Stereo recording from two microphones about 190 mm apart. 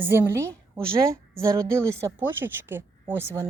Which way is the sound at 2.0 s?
10° right (ahead or behind).